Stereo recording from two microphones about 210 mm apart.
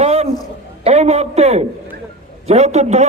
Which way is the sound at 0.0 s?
30° right (ahead or behind).